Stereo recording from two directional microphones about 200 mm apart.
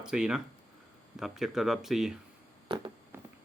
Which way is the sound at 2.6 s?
25° right (ahead or behind).